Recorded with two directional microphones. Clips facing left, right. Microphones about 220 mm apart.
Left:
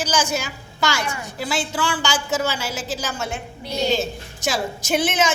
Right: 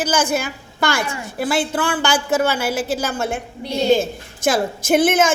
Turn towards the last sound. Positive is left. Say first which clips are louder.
# right 6 dB
turn(degrees=-55)  # may be behind; listen again after turning